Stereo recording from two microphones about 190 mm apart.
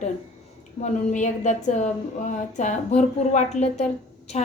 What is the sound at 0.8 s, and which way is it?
A woman's voice, 40° left (ahead or behind).